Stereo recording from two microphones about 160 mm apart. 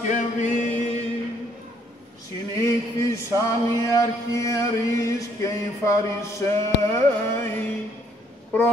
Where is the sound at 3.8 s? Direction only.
20° left (ahead or behind).